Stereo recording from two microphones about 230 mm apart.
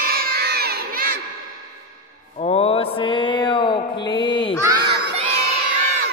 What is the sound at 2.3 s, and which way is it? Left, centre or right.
Mantra, left.